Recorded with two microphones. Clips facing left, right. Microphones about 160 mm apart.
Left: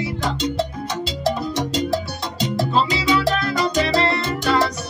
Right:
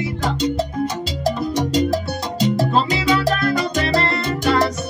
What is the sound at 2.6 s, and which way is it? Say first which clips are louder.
Salsa music: right 1 dB; 50° right (ahead or behind).